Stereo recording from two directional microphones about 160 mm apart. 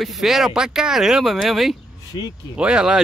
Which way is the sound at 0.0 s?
Centre (ahead or behind).